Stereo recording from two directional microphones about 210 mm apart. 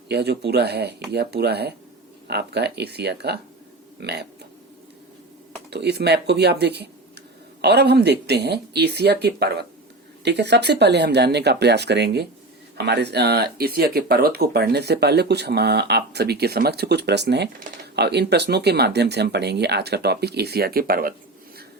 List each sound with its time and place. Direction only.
0.1 s speech: 50° right (ahead or behind)
5.7 s speech: 50° right (ahead or behind)